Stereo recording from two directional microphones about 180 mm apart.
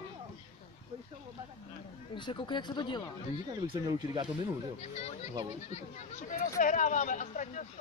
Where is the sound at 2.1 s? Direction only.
25° left (ahead or behind).